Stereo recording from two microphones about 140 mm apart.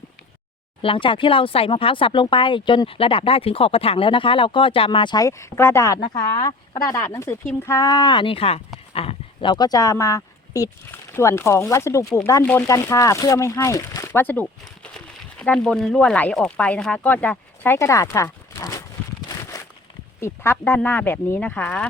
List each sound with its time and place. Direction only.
0.8 s speech: 40° left (ahead or behind); by 18.8 s 25° left (ahead or behind)
19.5 s a sound: 25° left (ahead or behind)
20.2 s speech: 15° left (ahead or behind)